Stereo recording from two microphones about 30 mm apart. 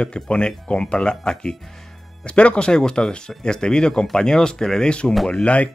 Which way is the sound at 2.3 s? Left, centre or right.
Left.